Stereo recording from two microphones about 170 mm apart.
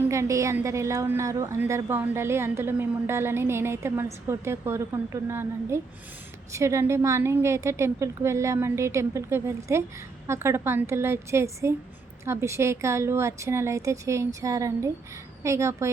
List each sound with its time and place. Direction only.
0.1 s a woman's voice: 15° right (ahead or behind)